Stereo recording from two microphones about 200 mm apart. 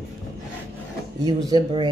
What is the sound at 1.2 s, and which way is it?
Speech, 20° right (ahead or behind).